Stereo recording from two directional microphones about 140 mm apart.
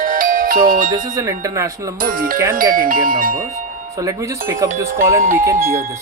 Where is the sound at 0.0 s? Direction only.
75° right (ahead or behind).